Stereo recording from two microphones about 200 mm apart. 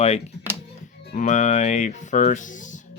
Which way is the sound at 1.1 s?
35° left (ahead or behind).